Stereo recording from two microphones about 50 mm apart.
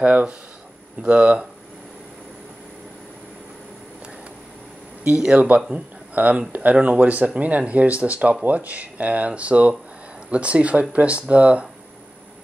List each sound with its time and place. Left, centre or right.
0.0 s speech: right
5.1 s speech: centre
5.7 s speech: right